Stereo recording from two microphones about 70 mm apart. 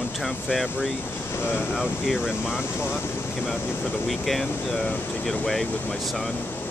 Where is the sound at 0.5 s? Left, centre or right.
Centre.